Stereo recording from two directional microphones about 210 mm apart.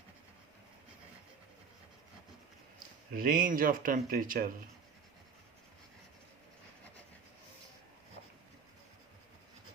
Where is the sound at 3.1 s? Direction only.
45° right (ahead or behind).